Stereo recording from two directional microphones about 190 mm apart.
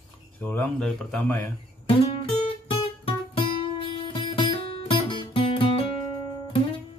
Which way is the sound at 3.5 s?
25° left (ahead or behind).